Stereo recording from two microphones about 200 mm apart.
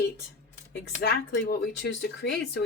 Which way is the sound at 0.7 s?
55° left (ahead or behind).